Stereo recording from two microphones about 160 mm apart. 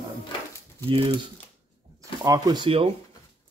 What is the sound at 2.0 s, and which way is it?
Speech, 20° right (ahead or behind).